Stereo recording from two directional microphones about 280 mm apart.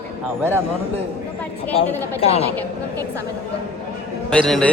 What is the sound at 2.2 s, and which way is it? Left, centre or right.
Speech, left.